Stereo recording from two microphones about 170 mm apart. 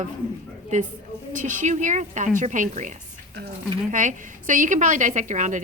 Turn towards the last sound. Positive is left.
turn(degrees=-45)  # may be behind; listen again after turning